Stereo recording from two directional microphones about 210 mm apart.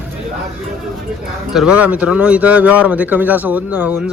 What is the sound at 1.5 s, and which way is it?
A man's voice, 5° right (ahead or behind).